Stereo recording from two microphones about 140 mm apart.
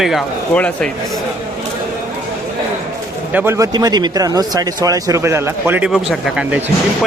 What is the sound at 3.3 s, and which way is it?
Speech, 15° right (ahead or behind).